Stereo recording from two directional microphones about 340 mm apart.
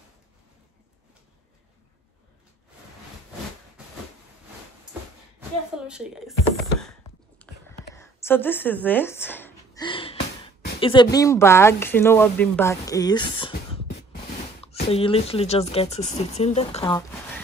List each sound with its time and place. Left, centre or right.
5.9 s speech: centre
7.4 s whispering: centre
7.9 s a sound: centre
10.8 s speech: centre